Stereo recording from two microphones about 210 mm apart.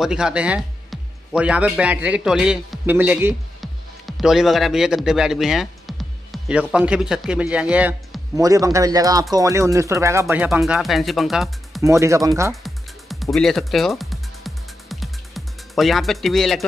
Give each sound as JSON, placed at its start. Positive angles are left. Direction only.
{"t": 0.0, "sound": "speech", "side_deg": -5}
{"t": 3.6, "sound": "music", "side_deg": 0}
{"t": 6.7, "sound": "speech", "side_deg": -5}
{"t": 11.8, "sound": "speech", "side_deg": -15}
{"t": 12.6, "sound": "music", "side_deg": 0}